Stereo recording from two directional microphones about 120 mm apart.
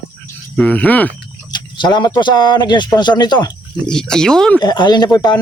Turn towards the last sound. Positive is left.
turn(degrees=30)  # may be behind; listen again after turning